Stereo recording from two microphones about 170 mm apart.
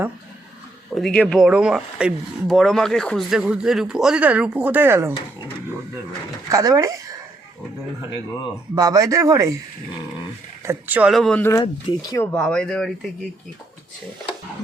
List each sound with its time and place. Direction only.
0.9 s speech: 5° left (ahead or behind); by 5.1 s 15° right (ahead or behind)
6.5 s speech: 20° right (ahead or behind)
8.7 s speech: 20° right (ahead or behind)
10.7 s speech: 10° right (ahead or behind)
11.1 s speech: 5° left (ahead or behind)